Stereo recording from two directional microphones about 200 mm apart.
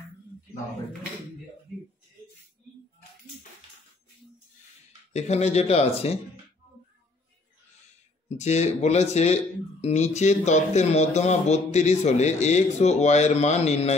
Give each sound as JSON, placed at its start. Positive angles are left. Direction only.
{"t": 5.1, "sound": "speech", "side_deg": 35}
{"t": 8.4, "sound": "speech", "side_deg": 35}